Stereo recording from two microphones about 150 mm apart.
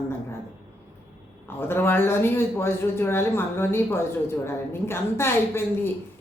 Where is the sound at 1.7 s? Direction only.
15° left (ahead or behind).